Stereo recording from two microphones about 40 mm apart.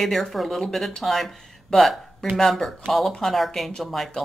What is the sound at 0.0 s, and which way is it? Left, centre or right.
Speech, centre.